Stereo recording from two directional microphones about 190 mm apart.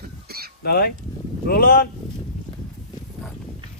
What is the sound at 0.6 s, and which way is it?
Speech, 55° left (ahead or behind).